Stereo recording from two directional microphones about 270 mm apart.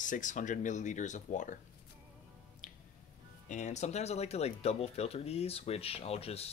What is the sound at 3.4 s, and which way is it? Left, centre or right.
Speech, left.